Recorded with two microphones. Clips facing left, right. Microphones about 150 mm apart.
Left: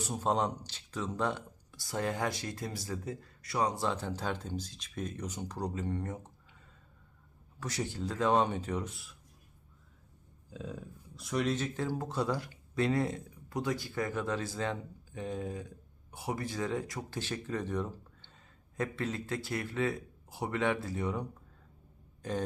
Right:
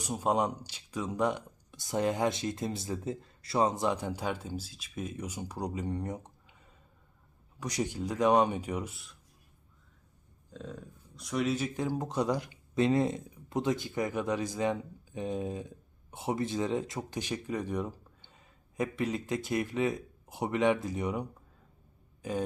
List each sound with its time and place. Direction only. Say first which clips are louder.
0.0 s speech: right 2 dB; 10° right (ahead or behind)
7.6 s speech: right 3 dB; 15° right (ahead or behind)
10.5 s speech: left 1 dB; 5° left (ahead or behind)